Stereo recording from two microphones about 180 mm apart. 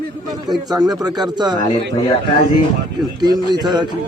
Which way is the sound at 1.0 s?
25° right (ahead or behind).